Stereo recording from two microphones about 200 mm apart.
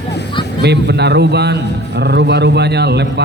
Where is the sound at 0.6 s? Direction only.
55° right (ahead or behind).